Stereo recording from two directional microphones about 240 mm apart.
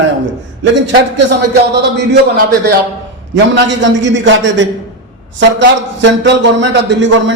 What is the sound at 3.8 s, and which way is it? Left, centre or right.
Speech, right.